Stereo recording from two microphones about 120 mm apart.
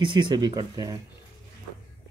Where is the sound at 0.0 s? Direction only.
40° right (ahead or behind).